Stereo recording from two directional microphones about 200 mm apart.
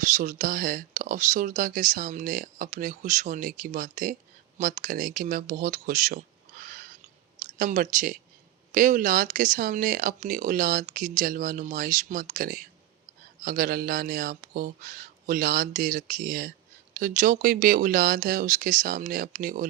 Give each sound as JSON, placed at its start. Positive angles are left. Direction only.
{"t": 0.0, "sound": "speech", "side_deg": -40}
{"t": 7.6, "sound": "speech", "side_deg": -40}